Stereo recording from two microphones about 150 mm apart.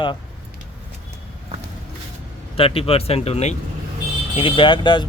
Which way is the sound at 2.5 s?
40° left (ahead or behind).